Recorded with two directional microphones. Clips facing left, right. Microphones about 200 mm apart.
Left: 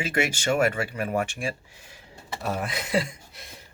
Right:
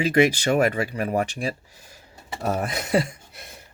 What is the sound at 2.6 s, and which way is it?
Speech, 45° right (ahead or behind).